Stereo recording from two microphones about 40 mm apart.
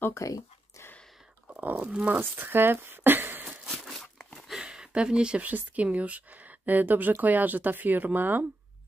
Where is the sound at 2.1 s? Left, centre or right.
Right.